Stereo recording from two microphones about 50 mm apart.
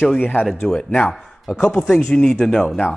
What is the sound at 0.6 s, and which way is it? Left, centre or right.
A man's voice, centre.